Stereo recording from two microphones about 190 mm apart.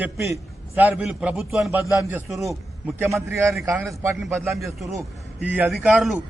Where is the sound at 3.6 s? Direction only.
10° right (ahead or behind).